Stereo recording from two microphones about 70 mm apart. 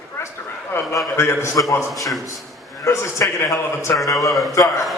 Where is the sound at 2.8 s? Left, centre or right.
Left.